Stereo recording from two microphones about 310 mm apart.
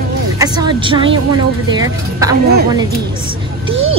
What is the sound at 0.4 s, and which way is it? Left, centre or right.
A woman's voice, centre.